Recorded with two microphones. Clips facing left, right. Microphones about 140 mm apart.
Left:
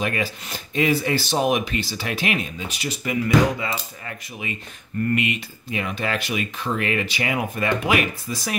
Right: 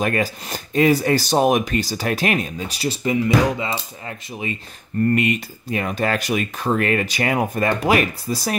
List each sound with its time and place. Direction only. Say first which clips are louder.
0.0 s speech: right 4 dB; 45° right (ahead or behind)